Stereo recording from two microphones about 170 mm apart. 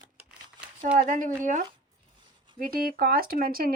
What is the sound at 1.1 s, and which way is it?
Speech, 50° right (ahead or behind).